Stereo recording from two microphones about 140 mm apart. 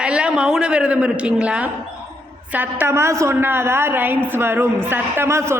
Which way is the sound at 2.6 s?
20° right (ahead or behind).